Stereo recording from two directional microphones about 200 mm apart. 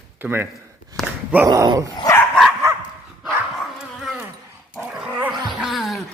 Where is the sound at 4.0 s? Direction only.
Centre (ahead or behind).